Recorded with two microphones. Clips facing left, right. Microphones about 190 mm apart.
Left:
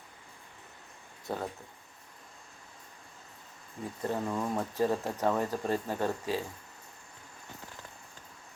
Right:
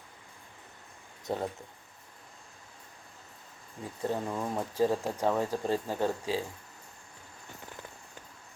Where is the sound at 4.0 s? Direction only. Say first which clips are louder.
Even; 10° right (ahead or behind).